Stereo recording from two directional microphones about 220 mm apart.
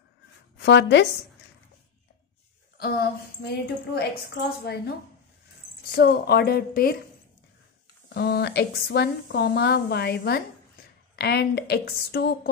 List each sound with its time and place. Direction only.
0.6 s speech: 50° left (ahead or behind)
2.8 s a woman's voice: 45° left (ahead or behind)
5.9 s a woman's voice: 45° left (ahead or behind)
8.1 s a woman's voice: 50° left (ahead or behind)